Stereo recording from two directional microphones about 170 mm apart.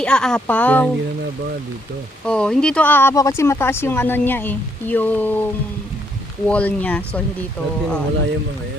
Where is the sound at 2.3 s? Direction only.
5° left (ahead or behind).